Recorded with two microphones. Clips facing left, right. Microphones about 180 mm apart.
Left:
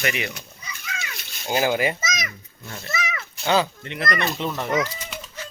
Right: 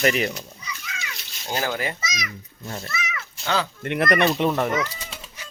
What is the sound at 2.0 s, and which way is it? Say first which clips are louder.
Speech: left 3 dB; 45° left (ahead or behind).